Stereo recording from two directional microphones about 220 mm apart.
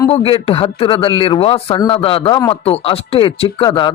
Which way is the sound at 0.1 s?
25° left (ahead or behind).